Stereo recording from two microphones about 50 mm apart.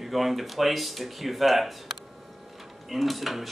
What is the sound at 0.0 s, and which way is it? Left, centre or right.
Speech, centre.